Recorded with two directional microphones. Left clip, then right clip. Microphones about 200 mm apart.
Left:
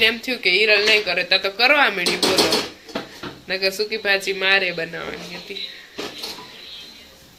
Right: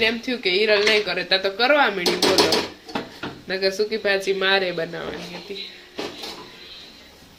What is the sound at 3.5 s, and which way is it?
Speech, 15° right (ahead or behind).